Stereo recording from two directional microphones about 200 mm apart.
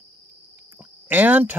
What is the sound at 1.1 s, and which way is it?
Speech, 10° right (ahead or behind).